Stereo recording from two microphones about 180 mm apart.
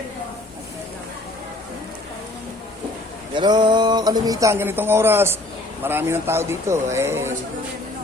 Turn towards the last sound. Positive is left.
turn(degrees=-15)  # may be behind; listen again after turning